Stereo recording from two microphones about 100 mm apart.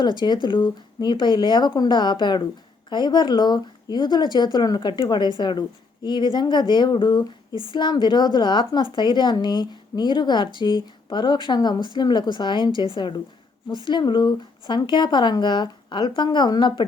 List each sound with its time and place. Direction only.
0.0 s a woman's voice: 50° left (ahead or behind)